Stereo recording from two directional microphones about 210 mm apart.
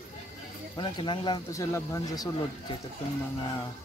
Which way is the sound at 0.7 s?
20° left (ahead or behind).